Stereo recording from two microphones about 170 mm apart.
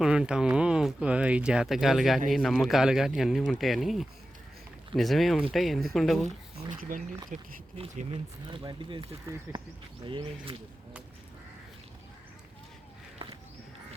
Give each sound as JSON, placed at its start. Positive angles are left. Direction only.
{"t": 0.0, "sound": "speech", "side_deg": -5}
{"t": 6.7, "sound": "speech", "side_deg": -50}
{"t": 7.8, "sound": "speech", "side_deg": -35}